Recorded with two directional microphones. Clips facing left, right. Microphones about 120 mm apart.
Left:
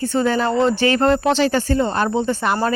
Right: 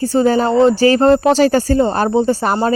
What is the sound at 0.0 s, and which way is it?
Speech, 35° right (ahead or behind).